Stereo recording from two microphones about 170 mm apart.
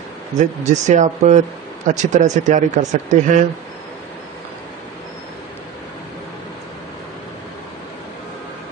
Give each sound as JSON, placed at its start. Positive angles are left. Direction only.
{"t": 0.4, "sound": "a man's voice", "side_deg": -45}